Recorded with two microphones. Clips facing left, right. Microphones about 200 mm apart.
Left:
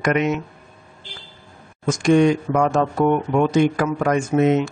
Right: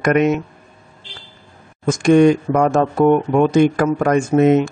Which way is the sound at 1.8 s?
50° right (ahead or behind).